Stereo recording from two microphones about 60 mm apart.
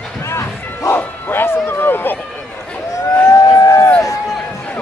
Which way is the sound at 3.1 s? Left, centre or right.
Left.